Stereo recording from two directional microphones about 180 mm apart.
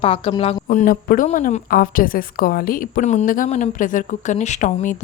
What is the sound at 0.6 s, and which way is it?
A woman's voice, 45° left (ahead or behind).